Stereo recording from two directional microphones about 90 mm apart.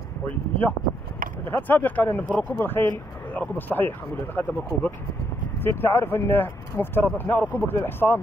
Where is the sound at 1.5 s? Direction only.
20° left (ahead or behind).